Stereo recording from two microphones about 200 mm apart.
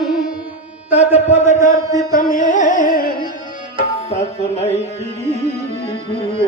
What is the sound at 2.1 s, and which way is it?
Music, 40° left (ahead or behind).